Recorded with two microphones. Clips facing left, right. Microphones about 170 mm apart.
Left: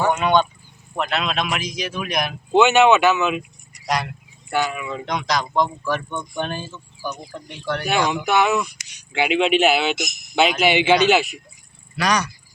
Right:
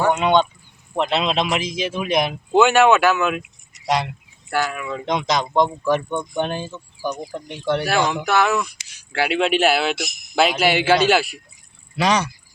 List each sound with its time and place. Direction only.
0.1 s a sound: 20° right (ahead or behind)
0.9 s speech: 25° right (ahead or behind)
2.5 s speech: centre (ahead or behind)
3.8 s speech: 25° right (ahead or behind)
4.5 s speech: centre (ahead or behind)
5.0 s speech: 25° right (ahead or behind)
7.9 s speech: centre (ahead or behind)
11.9 s speech: 25° right (ahead or behind)